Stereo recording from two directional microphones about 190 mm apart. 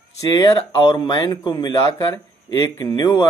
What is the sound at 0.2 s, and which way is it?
Speech, 15° left (ahead or behind).